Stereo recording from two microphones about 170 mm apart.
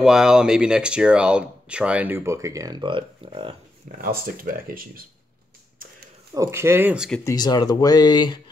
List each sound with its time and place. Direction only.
0.0 s speech: 5° right (ahead or behind); by 3.5 s 30° right (ahead or behind)
4.0 s speech: 60° right (ahead or behind)
6.3 s speech: 20° right (ahead or behind)
7.2 s speech: 25° left (ahead or behind)